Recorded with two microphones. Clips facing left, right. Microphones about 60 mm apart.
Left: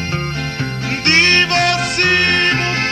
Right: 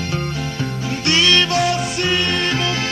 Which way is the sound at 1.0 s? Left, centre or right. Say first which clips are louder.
Left 3 dB; left.